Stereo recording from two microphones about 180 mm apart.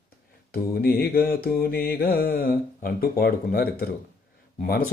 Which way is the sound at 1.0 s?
55° left (ahead or behind).